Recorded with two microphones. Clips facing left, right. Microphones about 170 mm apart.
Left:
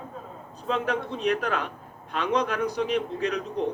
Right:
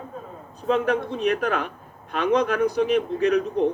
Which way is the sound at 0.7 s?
55° right (ahead or behind).